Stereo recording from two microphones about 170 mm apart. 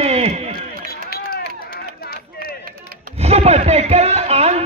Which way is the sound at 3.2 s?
40° right (ahead or behind).